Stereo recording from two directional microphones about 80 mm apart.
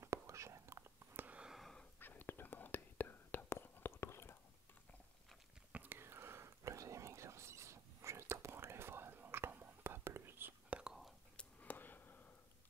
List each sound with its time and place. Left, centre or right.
0.0 s whispering: right
1.1 s a sound: right
1.4 s wheeze: centre
2.0 s whispering: left
5.7 s whispering: right
10.7 s whispering: centre
11.3 s a sound: left